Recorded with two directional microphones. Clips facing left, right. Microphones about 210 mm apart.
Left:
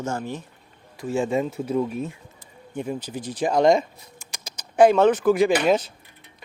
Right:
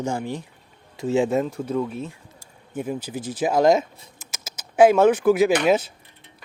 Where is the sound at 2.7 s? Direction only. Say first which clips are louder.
Right 1 dB; 5° right (ahead or behind).